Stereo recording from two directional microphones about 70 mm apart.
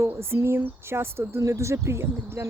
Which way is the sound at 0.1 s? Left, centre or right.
Right.